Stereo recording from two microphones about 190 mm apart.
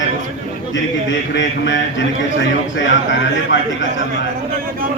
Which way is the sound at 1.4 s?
75° left (ahead or behind).